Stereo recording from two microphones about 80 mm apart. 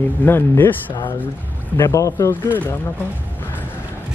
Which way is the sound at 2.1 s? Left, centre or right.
Left.